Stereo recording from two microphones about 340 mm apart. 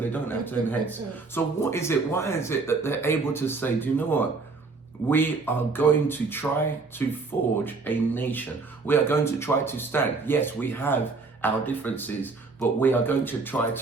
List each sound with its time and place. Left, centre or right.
0.1 s speech: centre